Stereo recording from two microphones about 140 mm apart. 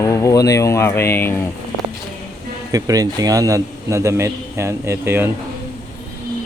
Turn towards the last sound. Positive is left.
turn(degrees=-15)  # may be behind; listen again after turning